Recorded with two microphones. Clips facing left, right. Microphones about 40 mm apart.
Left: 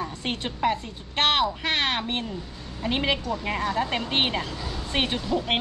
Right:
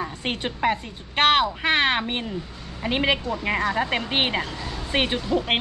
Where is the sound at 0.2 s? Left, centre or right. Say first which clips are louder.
Right 1 dB; centre.